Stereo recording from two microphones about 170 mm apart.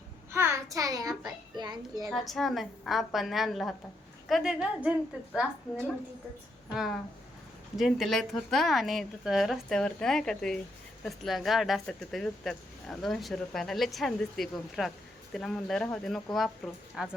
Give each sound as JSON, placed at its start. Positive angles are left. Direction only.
{"t": 0.3, "sound": "a child's voice", "side_deg": -15}
{"t": 2.0, "sound": "speech", "side_deg": 0}
{"t": 6.7, "sound": "a woman's voice", "side_deg": 0}